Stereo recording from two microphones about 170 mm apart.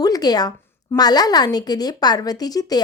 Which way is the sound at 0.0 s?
20° left (ahead or behind).